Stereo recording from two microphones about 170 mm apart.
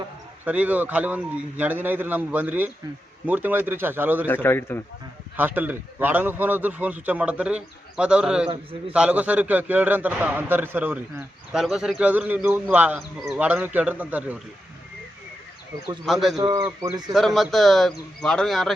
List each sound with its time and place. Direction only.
0.4 s a man's voice: 10° right (ahead or behind)
4.4 s a man's voice: 15° left (ahead or behind)
5.4 s a man's voice: 10° right (ahead or behind)
16.0 s speech: centre (ahead or behind)
16.4 s speech: 30° right (ahead or behind)
17.1 s speech: centre (ahead or behind)